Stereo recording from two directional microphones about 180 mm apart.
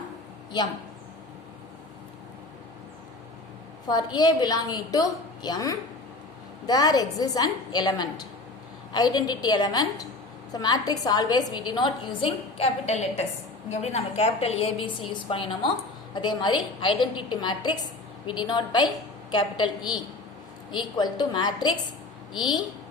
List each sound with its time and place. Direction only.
3.8 s a woman's voice: 25° left (ahead or behind)